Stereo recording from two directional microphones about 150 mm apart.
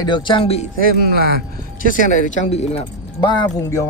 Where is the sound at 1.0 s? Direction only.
90° right.